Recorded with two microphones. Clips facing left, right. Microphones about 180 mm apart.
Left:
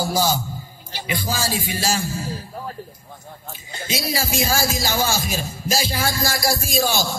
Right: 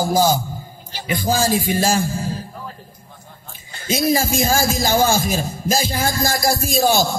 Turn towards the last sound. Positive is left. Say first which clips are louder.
# right 5 dB
turn(degrees=-50)  # may be behind; listen again after turning